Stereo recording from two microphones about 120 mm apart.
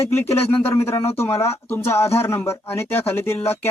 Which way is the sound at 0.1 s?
20° left (ahead or behind).